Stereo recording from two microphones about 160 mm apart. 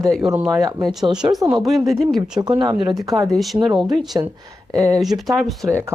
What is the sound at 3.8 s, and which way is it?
A woman's voice, centre (ahead or behind).